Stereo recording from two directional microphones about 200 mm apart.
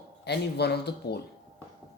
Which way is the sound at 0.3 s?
55° left (ahead or behind).